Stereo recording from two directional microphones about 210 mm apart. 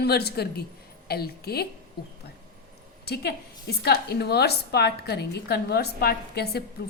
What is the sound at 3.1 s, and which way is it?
A woman's voice, 50° left (ahead or behind).